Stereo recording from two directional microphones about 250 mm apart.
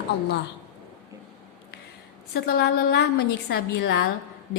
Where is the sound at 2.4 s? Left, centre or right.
Left.